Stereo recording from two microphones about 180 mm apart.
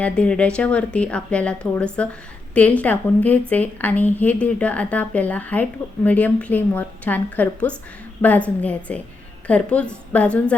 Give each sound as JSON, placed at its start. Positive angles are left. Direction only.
{"t": 0.0, "sound": "speech", "side_deg": 5}